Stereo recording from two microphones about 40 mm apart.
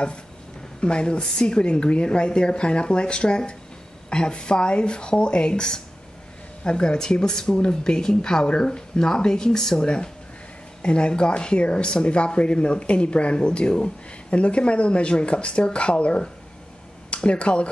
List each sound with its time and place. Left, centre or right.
0.7 s speech: left